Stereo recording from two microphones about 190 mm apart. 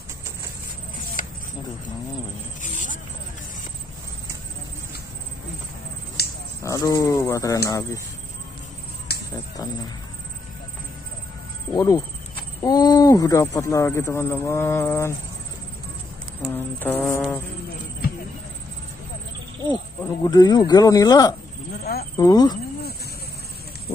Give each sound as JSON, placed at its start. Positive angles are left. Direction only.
{"t": 2.6, "sound": "a sound", "side_deg": 45}
{"t": 6.2, "sound": "a sound", "side_deg": 55}
{"t": 6.6, "sound": "speech", "side_deg": 20}
{"t": 9.1, "sound": "finger snapping", "side_deg": 55}
{"t": 11.7, "sound": "speech", "side_deg": 15}
{"t": 16.4, "sound": "speech", "side_deg": 10}
{"t": 19.7, "sound": "speech", "side_deg": 20}